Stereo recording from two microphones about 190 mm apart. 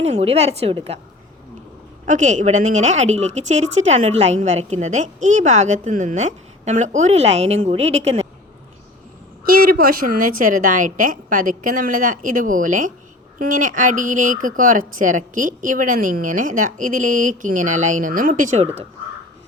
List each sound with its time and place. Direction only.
0.0 s a woman's voice: 35° right (ahead or behind)
2.0 s a woman's voice: 40° right (ahead or behind)
9.5 s speech: 50° right (ahead or behind); by 18.9 s 35° right (ahead or behind)